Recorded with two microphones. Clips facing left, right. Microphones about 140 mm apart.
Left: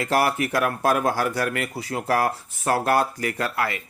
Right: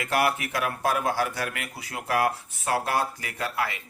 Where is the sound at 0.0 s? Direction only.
40° left (ahead or behind).